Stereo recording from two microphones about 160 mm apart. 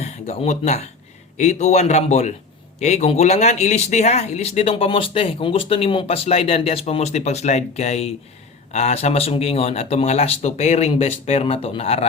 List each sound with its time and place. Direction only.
0.0 s a man's voice: 40° left (ahead or behind)